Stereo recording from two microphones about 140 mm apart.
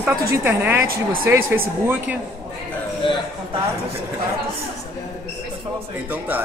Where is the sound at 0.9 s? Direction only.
90° right.